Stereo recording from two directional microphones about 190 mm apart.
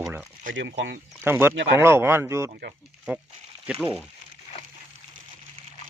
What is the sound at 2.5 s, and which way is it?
Speech, 50° right (ahead or behind).